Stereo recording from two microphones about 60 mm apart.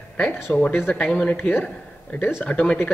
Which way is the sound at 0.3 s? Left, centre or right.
Left.